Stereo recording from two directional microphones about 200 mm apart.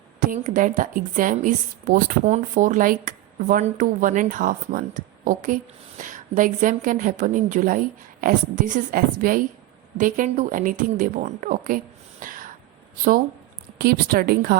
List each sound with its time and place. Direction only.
0.2 s a woman's voice: 40° right (ahead or behind)
12.2 s a sound: 45° right (ahead or behind)
13.7 s a woman's voice: 50° right (ahead or behind)